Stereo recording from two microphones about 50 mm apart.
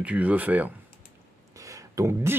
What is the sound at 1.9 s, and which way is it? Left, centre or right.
Speech, right.